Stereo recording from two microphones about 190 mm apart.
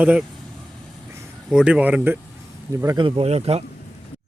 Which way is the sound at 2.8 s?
20° right (ahead or behind).